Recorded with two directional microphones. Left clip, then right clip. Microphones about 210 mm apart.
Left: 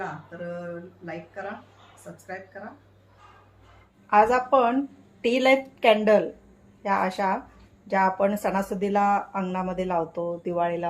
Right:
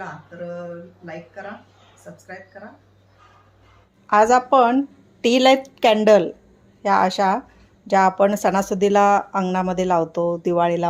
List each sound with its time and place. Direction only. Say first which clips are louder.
0.0 s speech: right 1 dB; centre (ahead or behind)
4.0 s speech: right 4 dB; 45° right (ahead or behind)